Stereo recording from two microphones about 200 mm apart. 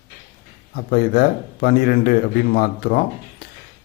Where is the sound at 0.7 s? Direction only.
50° left (ahead or behind).